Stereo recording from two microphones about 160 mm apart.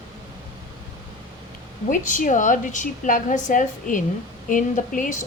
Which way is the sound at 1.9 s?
50° left (ahead or behind).